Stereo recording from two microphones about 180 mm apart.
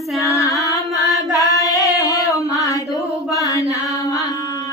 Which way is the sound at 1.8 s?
20° left (ahead or behind).